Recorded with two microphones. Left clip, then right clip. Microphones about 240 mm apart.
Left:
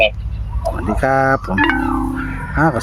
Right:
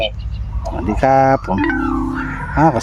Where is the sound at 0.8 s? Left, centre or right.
Centre.